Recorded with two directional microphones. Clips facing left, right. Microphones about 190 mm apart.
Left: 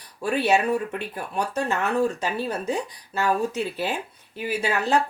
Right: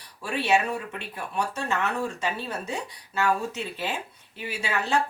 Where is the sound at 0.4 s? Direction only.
40° left (ahead or behind).